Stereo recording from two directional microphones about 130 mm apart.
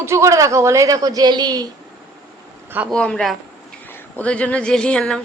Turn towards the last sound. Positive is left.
turn(degrees=5)  # may be behind; listen again after turning